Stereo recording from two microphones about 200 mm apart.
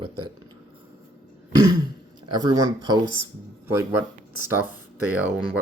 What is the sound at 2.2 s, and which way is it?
Speech, 20° right (ahead or behind).